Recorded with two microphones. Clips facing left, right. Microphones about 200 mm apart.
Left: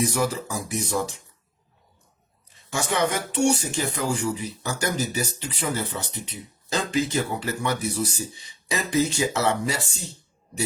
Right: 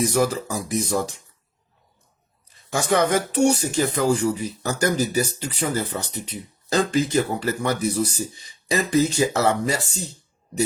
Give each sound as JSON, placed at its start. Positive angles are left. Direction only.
{"t": 0.0, "sound": "speech", "side_deg": -40}
{"t": 3.3, "sound": "speech", "side_deg": -40}